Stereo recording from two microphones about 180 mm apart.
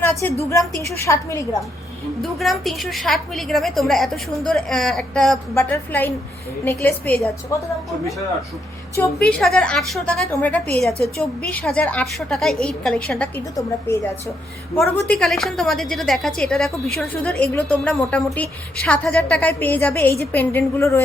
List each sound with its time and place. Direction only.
0.0 s a woman's voice: 10° left (ahead or behind)
2.2 s a woman's voice: centre (ahead or behind)
9.3 s a woman's voice: 5° left (ahead or behind)
14.8 s a woman's voice: 5° left (ahead or behind)